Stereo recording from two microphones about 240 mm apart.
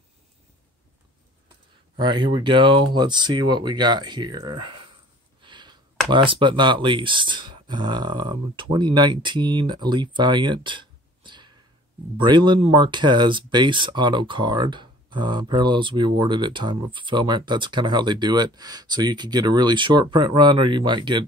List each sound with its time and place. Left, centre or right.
2.0 s speech: centre
5.4 s a sound: centre
6.0 s speech: centre